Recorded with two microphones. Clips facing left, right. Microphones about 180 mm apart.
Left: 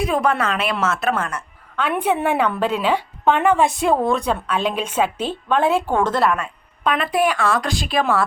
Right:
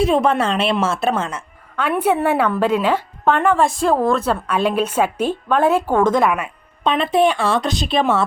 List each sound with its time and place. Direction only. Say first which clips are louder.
0.0 s a woman's voice: right 4 dB; 25° right (ahead or behind)
1.7 s a woman's voice: right 2 dB; 10° right (ahead or behind)
6.8 s a woman's voice: right 3 dB; 25° right (ahead or behind)